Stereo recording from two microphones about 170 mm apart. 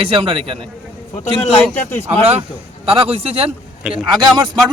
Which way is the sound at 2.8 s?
35° right (ahead or behind).